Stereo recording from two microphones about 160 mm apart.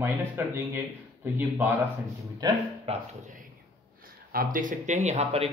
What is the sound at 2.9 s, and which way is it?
Speech, 40° right (ahead or behind).